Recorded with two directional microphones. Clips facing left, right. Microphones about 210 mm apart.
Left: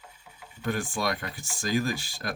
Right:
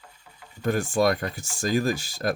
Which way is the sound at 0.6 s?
45° right (ahead or behind).